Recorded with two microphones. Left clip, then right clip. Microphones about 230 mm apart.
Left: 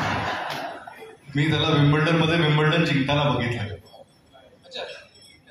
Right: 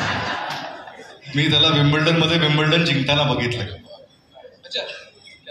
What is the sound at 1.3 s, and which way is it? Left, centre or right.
A man's voice, right.